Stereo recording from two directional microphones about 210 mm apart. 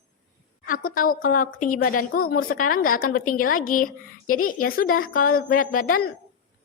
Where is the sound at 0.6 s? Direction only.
40° left (ahead or behind).